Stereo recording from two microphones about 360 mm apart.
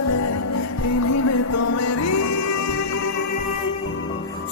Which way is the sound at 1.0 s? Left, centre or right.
Left.